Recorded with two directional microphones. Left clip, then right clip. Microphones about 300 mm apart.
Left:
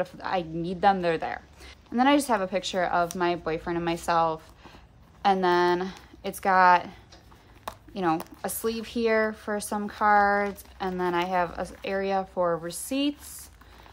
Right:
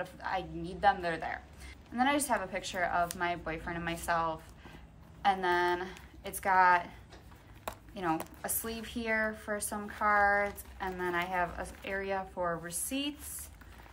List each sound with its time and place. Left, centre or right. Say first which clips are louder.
0.0 s speech: left 7 dB; centre